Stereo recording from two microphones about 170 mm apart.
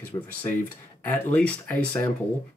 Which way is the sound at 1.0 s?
10° left (ahead or behind).